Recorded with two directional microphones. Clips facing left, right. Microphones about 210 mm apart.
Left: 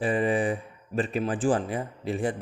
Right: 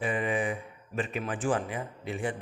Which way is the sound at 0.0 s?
35° left (ahead or behind).